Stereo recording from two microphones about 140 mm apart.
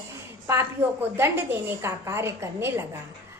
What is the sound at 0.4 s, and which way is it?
A woman's voice, 20° right (ahead or behind).